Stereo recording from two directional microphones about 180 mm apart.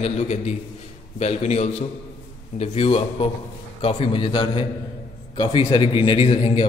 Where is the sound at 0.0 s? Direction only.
35° left (ahead or behind).